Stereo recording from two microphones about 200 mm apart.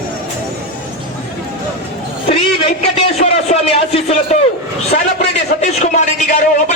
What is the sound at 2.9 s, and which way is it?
Music, 35° left (ahead or behind).